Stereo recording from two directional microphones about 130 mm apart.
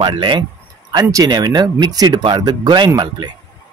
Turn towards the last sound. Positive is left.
turn(degrees=-35)  # may be behind; listen again after turning